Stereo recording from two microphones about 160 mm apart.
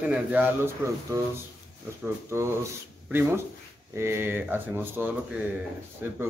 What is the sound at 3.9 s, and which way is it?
Speech, 15° right (ahead or behind).